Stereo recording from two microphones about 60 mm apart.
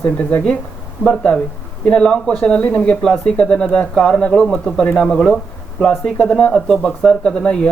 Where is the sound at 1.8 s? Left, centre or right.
Centre.